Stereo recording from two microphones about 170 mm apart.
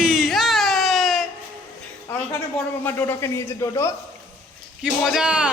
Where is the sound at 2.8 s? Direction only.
10° left (ahead or behind).